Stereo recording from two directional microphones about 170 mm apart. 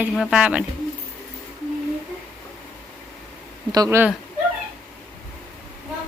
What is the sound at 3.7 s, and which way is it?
Speech, 20° right (ahead or behind).